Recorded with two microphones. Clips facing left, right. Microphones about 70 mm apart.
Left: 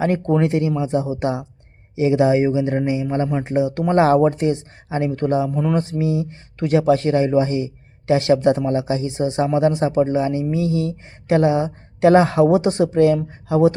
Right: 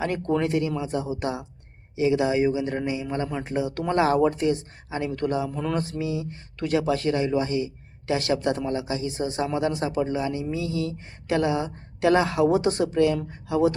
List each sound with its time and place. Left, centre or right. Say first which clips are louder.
0.0 s speech: left 6 dB; left